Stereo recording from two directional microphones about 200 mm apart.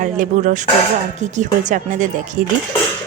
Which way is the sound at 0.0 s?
40° right (ahead or behind).